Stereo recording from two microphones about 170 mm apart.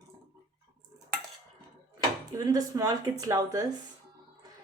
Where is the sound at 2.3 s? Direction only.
20° right (ahead or behind).